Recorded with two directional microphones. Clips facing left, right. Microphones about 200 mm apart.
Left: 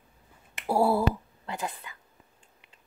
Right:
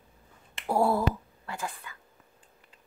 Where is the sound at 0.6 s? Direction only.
10° left (ahead or behind).